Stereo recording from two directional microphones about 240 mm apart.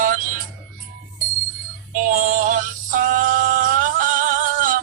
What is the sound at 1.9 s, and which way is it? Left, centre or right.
Synthetic singing, right.